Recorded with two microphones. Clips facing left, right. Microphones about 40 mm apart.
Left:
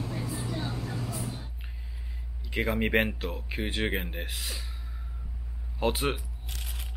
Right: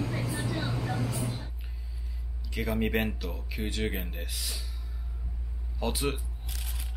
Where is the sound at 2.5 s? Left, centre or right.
Left.